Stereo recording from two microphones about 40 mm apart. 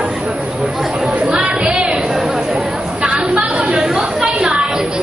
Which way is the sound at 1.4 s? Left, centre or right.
Right.